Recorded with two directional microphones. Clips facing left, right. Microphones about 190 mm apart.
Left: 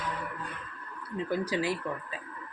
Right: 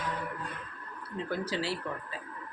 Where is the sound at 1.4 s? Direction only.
15° left (ahead or behind).